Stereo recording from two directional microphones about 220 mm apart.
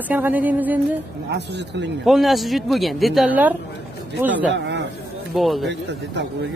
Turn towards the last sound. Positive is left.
turn(degrees=-50)  # may be behind; listen again after turning